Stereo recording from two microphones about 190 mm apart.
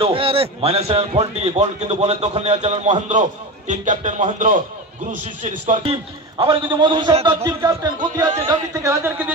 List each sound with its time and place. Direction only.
0.0 s a man's voice: 30° right (ahead or behind)
5.9 s a man's voice: 25° right (ahead or behind)
7.4 s a man's voice: 20° right (ahead or behind)